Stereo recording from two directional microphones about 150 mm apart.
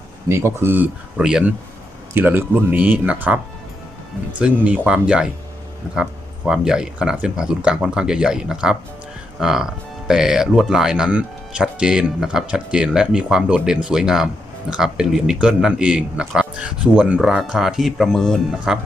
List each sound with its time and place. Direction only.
0.3 s speech: 15° right (ahead or behind); by 18.6 s 5° left (ahead or behind)